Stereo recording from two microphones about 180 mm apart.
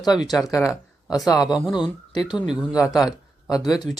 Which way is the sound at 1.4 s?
5° right (ahead or behind).